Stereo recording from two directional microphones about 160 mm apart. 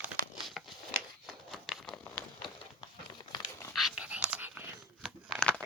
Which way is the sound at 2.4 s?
30° left (ahead or behind).